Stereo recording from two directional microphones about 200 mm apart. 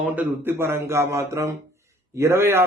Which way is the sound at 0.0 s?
10° right (ahead or behind).